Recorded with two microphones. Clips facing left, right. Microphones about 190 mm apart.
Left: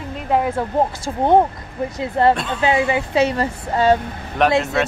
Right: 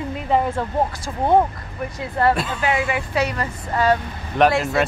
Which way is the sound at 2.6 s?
25° left (ahead or behind).